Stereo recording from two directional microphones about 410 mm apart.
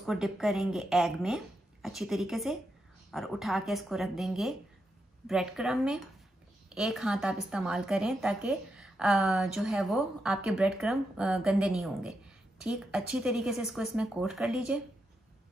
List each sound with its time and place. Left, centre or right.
0.0 s a woman's voice: centre